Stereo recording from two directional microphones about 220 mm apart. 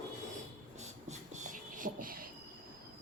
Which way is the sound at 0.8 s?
30° right (ahead or behind).